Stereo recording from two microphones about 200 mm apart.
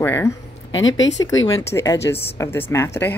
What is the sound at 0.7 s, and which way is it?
Speech, 70° left (ahead or behind).